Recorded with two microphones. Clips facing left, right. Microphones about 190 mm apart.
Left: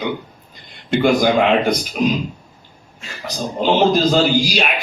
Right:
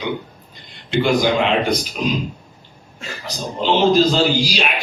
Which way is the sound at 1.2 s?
45° left (ahead or behind).